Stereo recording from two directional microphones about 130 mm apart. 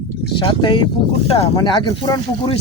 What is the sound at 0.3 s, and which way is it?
Speech, 35° left (ahead or behind).